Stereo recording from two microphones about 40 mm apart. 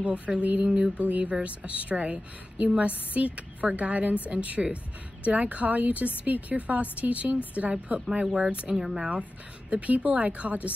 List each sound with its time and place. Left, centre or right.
0.4 s speech: right
0.7 s speech: right
0.9 s speech: right
9.7 s speech: right